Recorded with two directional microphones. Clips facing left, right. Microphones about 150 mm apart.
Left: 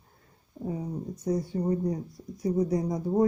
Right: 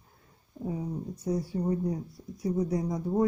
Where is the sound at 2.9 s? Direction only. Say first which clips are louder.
Left 2 dB; 20° left (ahead or behind).